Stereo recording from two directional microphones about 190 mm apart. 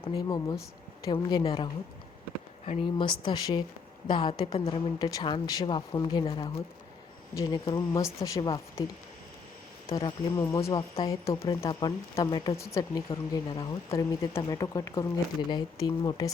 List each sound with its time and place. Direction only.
0.0 s speech: 25° left (ahead or behind)
9.9 s speech: 20° left (ahead or behind)